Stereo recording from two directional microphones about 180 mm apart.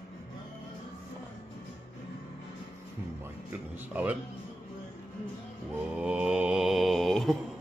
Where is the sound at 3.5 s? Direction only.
10° right (ahead or behind).